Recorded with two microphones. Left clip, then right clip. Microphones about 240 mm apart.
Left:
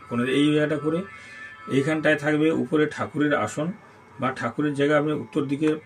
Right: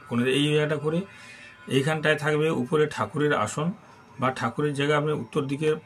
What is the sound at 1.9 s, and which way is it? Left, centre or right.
Speech, right.